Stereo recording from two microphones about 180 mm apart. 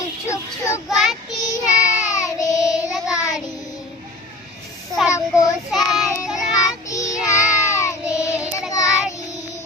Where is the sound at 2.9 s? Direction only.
Centre (ahead or behind).